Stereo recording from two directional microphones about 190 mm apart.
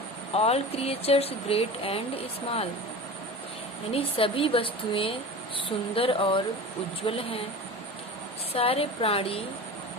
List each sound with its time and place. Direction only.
0.3 s speech: 30° left (ahead or behind)
3.9 s a woman's voice: 30° left (ahead or behind)
8.5 s a woman's voice: 30° left (ahead or behind)